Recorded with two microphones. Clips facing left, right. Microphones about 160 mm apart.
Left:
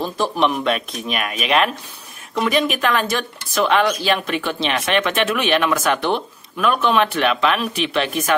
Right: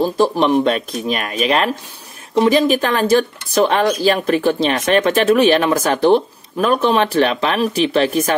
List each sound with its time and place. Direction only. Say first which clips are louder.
0.0 s speech: right 5 dB; 35° right (ahead or behind)